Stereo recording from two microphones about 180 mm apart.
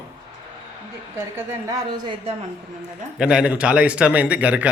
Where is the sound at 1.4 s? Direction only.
20° right (ahead or behind).